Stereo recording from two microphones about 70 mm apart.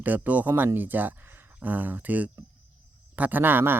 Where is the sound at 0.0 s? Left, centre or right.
Right.